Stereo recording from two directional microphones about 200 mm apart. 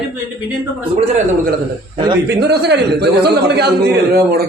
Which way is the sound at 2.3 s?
55° right (ahead or behind).